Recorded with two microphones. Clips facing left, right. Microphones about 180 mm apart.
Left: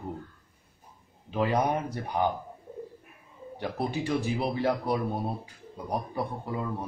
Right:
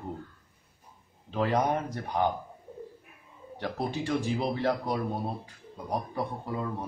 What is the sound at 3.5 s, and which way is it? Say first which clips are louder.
Speech: left 1 dB; 10° left (ahead or behind).